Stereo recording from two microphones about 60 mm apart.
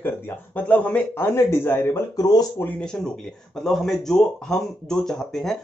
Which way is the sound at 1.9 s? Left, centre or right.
Left.